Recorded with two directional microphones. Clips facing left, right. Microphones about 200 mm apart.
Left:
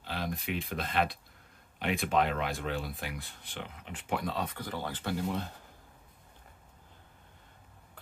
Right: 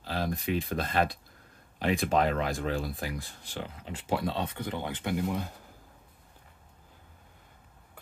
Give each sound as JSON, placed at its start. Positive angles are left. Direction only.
{"t": 0.0, "sound": "speech", "side_deg": -40}